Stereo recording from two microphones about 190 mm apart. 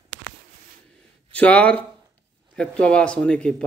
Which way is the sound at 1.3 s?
5° left (ahead or behind).